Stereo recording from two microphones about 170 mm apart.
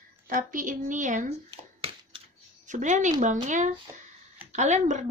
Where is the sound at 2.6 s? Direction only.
45° right (ahead or behind).